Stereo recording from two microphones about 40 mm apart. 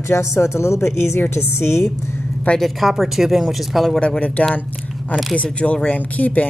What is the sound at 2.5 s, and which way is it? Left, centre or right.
Speech, centre.